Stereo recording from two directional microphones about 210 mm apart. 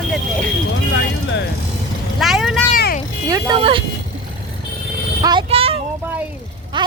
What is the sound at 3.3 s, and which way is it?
Speech, 15° right (ahead or behind).